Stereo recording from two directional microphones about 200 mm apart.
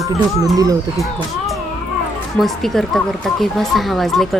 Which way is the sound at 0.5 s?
20° right (ahead or behind).